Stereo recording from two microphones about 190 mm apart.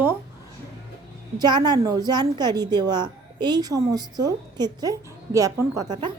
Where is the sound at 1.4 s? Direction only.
20° right (ahead or behind).